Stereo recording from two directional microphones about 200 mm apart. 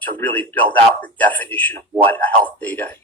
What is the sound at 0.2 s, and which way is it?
Speech, 10° left (ahead or behind).